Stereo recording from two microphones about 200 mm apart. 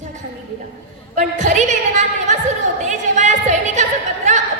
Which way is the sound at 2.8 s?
35° right (ahead or behind).